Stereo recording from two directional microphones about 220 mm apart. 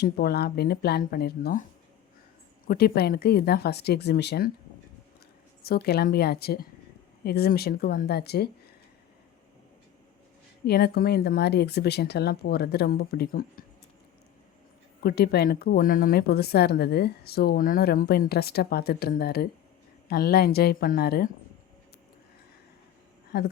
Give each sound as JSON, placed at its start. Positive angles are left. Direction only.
{"t": 0.0, "sound": "speech", "side_deg": 45}
{"t": 2.6, "sound": "speech", "side_deg": 45}
{"t": 5.6, "sound": "speech", "side_deg": 45}
{"t": 10.7, "sound": "speech", "side_deg": 45}
{"t": 15.0, "sound": "speech", "side_deg": 45}
{"t": 23.3, "sound": "speech", "side_deg": 50}